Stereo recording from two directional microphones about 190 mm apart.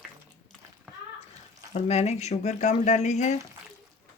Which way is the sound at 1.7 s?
35° left (ahead or behind).